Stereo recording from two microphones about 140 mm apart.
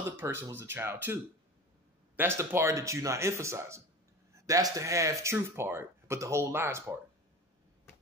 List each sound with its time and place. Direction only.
0.1 s speech: 15° right (ahead or behind)